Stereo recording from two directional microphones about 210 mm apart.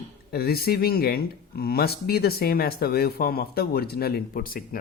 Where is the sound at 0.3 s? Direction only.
45° left (ahead or behind).